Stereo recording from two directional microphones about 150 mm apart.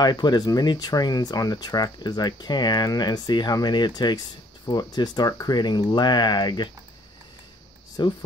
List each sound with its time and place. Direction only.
0.0 s speech: 30° left (ahead or behind)
8.0 s speech: 30° left (ahead or behind)